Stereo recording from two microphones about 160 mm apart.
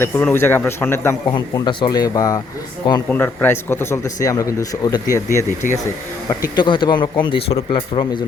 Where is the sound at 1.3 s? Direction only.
30° left (ahead or behind).